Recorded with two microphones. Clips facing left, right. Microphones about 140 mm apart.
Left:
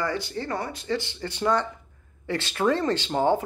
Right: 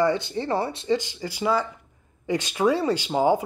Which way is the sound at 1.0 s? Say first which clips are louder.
Even; 10° right (ahead or behind).